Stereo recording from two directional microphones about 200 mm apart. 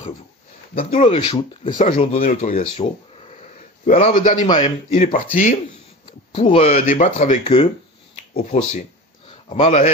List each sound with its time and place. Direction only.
0.8 s speech: 30° left (ahead or behind)
4.5 s a man's voice: 25° left (ahead or behind)
4.9 s speech: 40° left (ahead or behind)
6.0 s speech: 30° left (ahead or behind)